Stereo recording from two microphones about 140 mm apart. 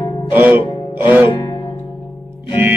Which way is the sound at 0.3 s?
15° right (ahead or behind).